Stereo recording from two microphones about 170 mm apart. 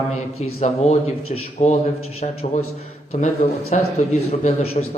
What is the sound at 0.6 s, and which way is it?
A man's voice, 40° left (ahead or behind).